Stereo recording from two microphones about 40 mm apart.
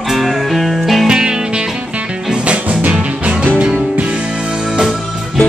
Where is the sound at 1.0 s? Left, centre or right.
Centre.